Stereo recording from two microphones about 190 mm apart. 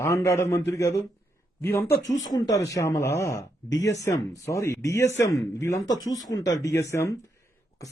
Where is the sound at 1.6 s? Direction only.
10° left (ahead or behind).